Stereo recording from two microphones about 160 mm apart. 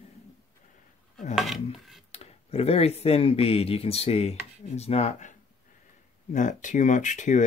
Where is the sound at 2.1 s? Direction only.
40° left (ahead or behind).